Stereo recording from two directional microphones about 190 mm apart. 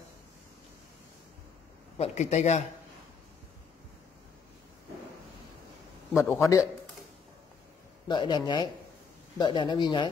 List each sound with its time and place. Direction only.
2.0 s speech: 35° left (ahead or behind)
6.1 s a man's voice: 15° left (ahead or behind)
8.1 s speech: 25° left (ahead or behind)